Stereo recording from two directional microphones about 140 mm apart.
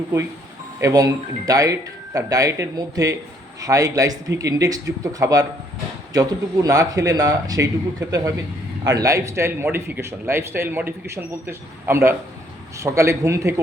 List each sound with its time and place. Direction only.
0.8 s a man's voice: 25° right (ahead or behind)